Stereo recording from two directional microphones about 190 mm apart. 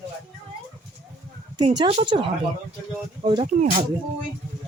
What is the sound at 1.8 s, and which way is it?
Speech, 30° right (ahead or behind).